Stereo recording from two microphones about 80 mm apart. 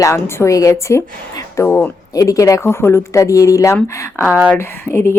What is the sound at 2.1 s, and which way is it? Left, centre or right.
Speech, left.